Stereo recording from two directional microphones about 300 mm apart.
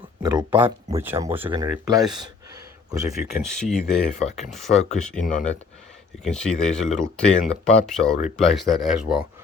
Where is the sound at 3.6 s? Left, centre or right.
Centre.